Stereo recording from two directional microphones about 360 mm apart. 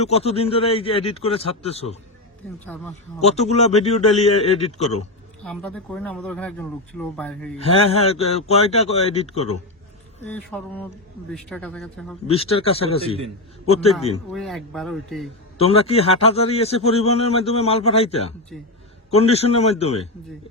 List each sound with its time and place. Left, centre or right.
0.0 s a man's voice: centre
3.2 s a man's voice: centre
5.4 s speech: centre
7.6 s a man's voice: centre
10.2 s speech: centre
12.3 s a man's voice: centre
14.3 s speech: centre
15.5 s a man's voice: centre